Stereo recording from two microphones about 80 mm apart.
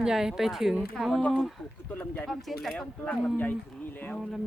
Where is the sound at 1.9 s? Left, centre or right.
Left.